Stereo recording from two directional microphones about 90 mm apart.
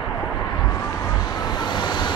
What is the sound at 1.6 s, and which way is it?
Vehicle, 55° left (ahead or behind).